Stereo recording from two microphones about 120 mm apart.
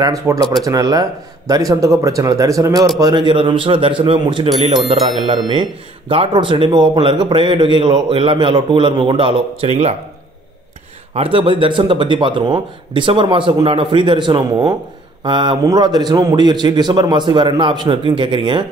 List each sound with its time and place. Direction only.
0.0 s a man's voice: 30° right (ahead or behind)
3.0 s speech: 40° right (ahead or behind); by 9.9 s 60° right (ahead or behind)
11.1 s a man's voice: 50° right (ahead or behind)